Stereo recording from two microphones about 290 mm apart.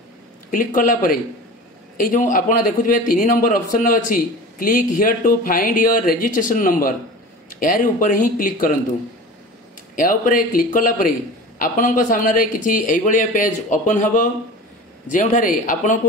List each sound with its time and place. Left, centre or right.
0.5 s a man's voice: left
9.9 s a man's voice: left